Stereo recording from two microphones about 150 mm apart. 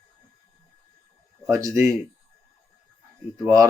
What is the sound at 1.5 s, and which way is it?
Speech, 20° right (ahead or behind).